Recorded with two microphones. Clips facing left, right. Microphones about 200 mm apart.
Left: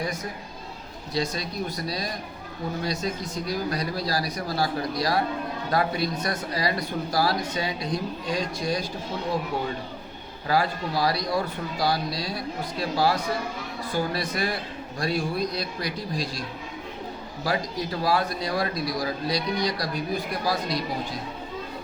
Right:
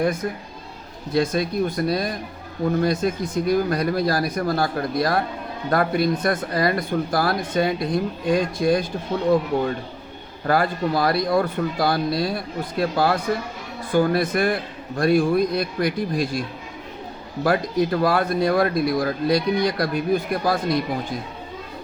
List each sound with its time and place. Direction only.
0.0 s speech: 55° right (ahead or behind)
17.4 s speech: 55° right (ahead or behind)